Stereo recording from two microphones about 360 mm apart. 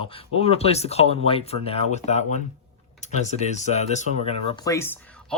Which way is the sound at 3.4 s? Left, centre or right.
Centre.